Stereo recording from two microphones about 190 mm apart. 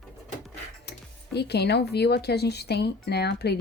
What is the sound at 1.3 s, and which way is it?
Speech, 60° left (ahead or behind).